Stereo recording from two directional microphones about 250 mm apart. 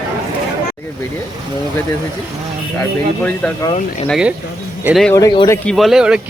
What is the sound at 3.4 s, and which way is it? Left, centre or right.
Speech, centre.